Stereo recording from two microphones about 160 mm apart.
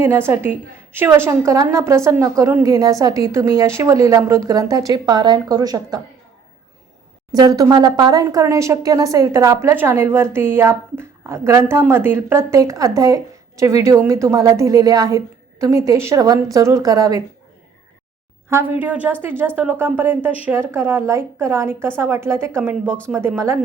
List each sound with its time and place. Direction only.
0.0 s a woman's voice: 15° right (ahead or behind)
7.3 s speech: 25° right (ahead or behind)
18.4 s a woman's voice: 15° right (ahead or behind)